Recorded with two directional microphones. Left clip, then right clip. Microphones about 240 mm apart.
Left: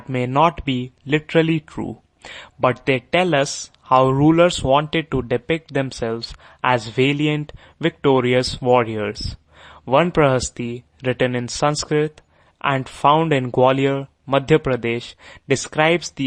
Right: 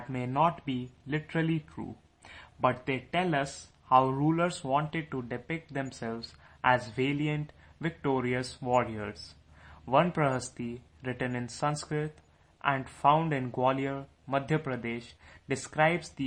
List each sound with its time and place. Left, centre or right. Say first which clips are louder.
0.1 s speech: left 11 dB; left